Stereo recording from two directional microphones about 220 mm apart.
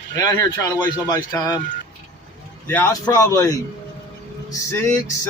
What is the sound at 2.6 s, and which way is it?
A man's voice, 10° left (ahead or behind).